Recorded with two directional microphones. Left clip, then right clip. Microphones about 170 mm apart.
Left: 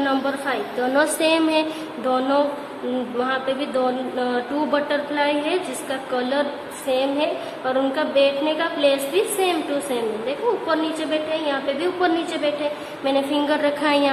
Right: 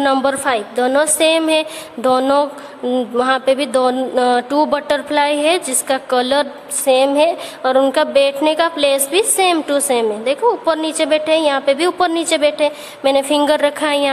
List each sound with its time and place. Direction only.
0.0 s a woman's voice: 65° right (ahead or behind)